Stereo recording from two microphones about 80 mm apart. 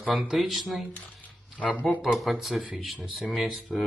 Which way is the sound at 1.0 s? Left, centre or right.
Centre.